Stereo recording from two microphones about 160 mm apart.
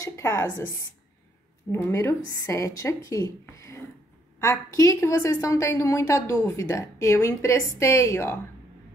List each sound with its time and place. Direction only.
0.0 s a woman's voice: 20° left (ahead or behind)
1.7 s a woman's voice: 15° left (ahead or behind)